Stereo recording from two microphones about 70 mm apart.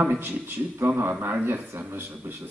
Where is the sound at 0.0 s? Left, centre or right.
Right.